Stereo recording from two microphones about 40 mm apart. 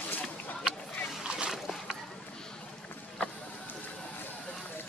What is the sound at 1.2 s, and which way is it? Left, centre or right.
Boat, right.